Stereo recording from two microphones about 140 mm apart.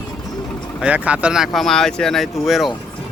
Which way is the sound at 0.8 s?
10° right (ahead or behind).